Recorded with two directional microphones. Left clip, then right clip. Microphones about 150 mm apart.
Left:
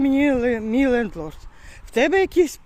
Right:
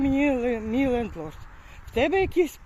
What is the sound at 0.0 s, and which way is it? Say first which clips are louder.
Speech: left 5 dB; 45° left (ahead or behind).